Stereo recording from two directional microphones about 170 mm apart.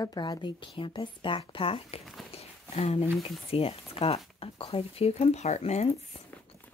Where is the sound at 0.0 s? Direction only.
25° left (ahead or behind).